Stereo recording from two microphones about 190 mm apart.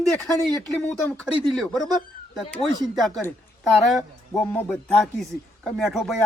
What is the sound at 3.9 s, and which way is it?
Speech, 5° left (ahead or behind).